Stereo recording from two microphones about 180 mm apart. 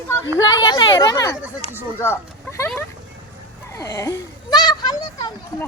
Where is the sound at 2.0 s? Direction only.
15° left (ahead or behind).